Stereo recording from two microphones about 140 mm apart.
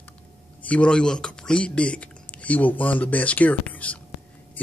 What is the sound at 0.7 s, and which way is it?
Speech, 10° left (ahead or behind).